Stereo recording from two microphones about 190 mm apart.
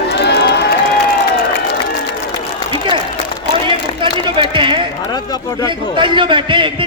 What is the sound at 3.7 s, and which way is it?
Speech, 25° right (ahead or behind).